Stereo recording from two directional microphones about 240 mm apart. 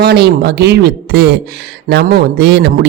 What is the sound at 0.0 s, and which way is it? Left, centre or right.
A man's voice, right.